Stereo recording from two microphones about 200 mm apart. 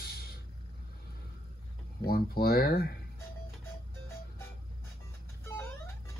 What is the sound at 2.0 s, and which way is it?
Speech, 50° left (ahead or behind).